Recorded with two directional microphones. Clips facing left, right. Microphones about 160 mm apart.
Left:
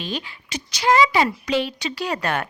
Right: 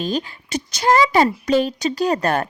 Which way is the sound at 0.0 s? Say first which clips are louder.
Right 7 dB; 45° right (ahead or behind).